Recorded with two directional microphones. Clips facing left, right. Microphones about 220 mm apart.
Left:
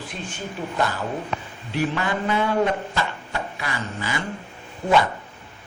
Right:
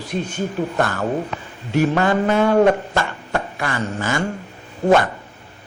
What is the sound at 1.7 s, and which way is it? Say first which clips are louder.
Chopping: right 7 dB; 45° right (ahead or behind).